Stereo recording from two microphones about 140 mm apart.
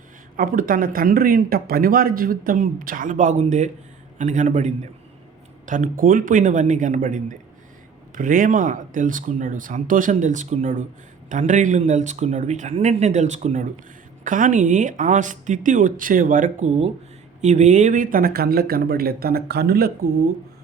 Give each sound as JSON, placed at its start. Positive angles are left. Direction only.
{"t": 0.3, "sound": "speech", "side_deg": -90}
{"t": 5.6, "sound": "speech", "side_deg": -70}
{"t": 8.1, "sound": "speech", "side_deg": -75}
{"t": 14.3, "sound": "speech", "side_deg": -70}